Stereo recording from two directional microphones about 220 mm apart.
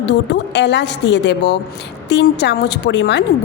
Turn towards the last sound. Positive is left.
turn(degrees=50)  # may be behind; listen again after turning